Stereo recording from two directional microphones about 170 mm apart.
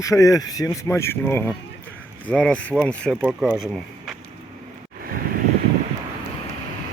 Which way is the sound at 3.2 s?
5° right (ahead or behind).